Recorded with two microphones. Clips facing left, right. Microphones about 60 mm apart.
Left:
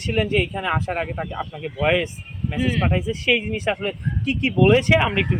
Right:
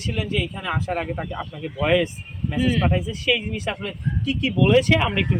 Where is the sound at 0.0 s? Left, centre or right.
Left.